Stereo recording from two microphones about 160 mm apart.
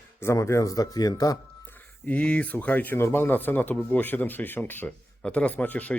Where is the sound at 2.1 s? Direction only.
10° left (ahead or behind).